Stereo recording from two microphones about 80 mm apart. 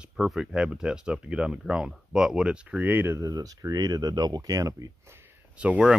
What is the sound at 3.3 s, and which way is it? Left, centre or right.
Speech, right.